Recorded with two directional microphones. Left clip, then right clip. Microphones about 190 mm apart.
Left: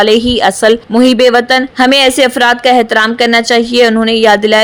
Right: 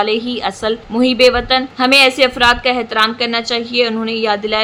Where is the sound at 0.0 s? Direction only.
40° left (ahead or behind).